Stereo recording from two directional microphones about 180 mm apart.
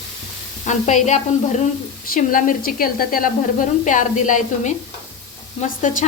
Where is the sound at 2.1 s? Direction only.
50° left (ahead or behind).